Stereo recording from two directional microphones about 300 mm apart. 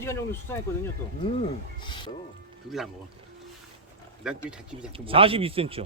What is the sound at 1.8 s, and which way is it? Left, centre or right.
Music, centre.